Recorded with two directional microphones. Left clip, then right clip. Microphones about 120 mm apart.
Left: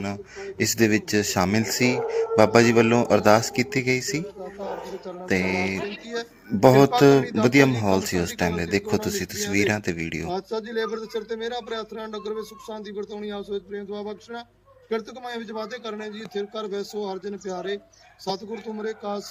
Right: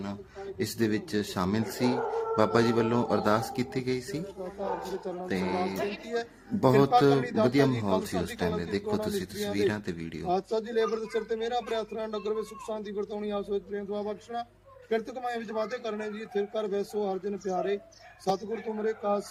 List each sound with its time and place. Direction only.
0.6 s speech: 30° left (ahead or behind)
5.3 s speech: 35° left (ahead or behind)
5.8 s a man's voice: 5° right (ahead or behind)
6.8 s speech: 30° left (ahead or behind)
7.2 s a man's voice: 10° right (ahead or behind)
7.4 s speech: 35° left (ahead or behind)
10.2 s a man's voice: 10° right (ahead or behind)